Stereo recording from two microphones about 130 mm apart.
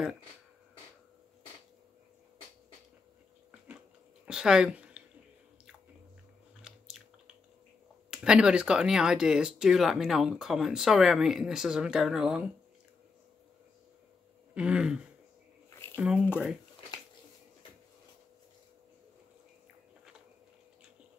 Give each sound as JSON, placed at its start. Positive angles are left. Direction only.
{"t": 4.3, "sound": "speech", "side_deg": -5}
{"t": 6.7, "sound": "biting", "side_deg": -5}
{"t": 8.1, "sound": "speech", "side_deg": -5}
{"t": 14.5, "sound": "a sound", "side_deg": -10}